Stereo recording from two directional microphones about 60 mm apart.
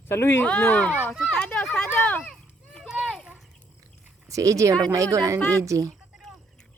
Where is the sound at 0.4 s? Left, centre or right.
Left.